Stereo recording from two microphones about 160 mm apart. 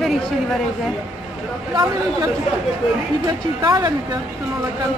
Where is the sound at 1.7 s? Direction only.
20° right (ahead or behind).